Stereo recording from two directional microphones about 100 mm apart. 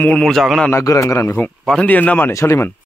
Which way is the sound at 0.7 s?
30° left (ahead or behind).